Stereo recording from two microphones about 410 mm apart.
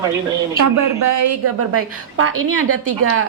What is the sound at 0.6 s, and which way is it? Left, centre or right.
A woman's voice, right.